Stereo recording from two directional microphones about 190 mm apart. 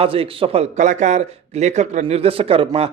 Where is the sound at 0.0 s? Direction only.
30° right (ahead or behind).